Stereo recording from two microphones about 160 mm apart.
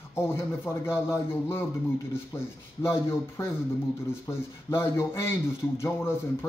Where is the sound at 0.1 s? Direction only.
15° left (ahead or behind).